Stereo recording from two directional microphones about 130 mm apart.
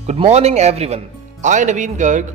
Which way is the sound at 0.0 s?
55° right (ahead or behind).